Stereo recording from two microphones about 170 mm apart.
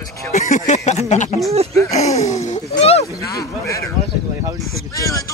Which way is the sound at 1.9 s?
40° left (ahead or behind).